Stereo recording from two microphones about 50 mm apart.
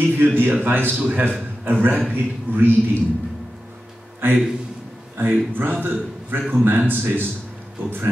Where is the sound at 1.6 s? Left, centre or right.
Right.